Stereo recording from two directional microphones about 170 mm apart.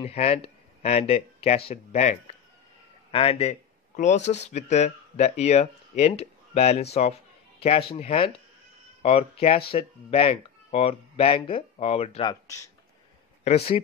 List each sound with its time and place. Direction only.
0.0 s a man's voice: 35° left (ahead or behind)
12.3 s speech: 20° left (ahead or behind)
13.4 s speech: 40° left (ahead or behind)